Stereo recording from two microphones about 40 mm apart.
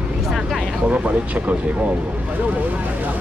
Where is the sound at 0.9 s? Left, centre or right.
Right.